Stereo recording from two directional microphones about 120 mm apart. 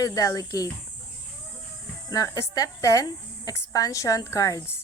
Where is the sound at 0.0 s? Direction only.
30° left (ahead or behind).